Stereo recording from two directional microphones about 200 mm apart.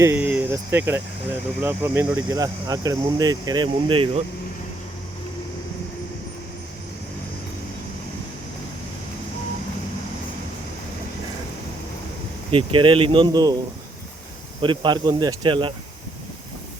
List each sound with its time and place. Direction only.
0.0 s speech: 10° right (ahead or behind); by 4.1 s 25° right (ahead or behind)
12.5 s speech: 25° right (ahead or behind)
14.6 s speech: 25° right (ahead or behind)